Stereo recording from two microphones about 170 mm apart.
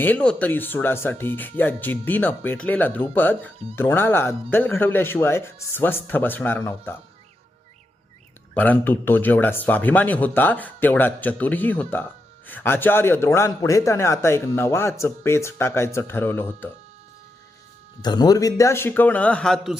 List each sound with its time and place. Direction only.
0.0 s a man's voice: 10° left (ahead or behind)
8.5 s a man's voice: 10° left (ahead or behind)
18.0 s a man's voice: 25° left (ahead or behind); by 19.7 s 5° left (ahead or behind)